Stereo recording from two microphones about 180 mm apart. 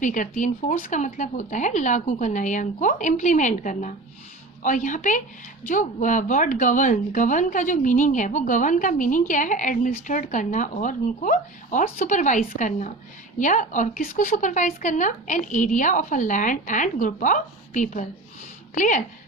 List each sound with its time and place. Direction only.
0.0 s speech: 45° left (ahead or behind)